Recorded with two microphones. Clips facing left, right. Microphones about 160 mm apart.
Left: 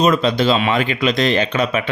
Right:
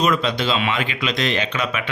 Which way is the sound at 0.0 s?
30° left (ahead or behind).